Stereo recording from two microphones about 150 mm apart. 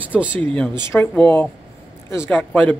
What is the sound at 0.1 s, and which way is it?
Speech, 10° right (ahead or behind).